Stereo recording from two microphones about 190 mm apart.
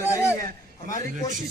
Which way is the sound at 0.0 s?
15° left (ahead or behind).